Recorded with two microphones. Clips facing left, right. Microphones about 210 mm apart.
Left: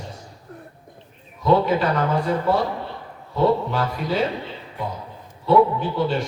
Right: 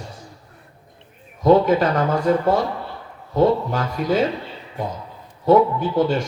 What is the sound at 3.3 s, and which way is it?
Speech, 45° right (ahead or behind).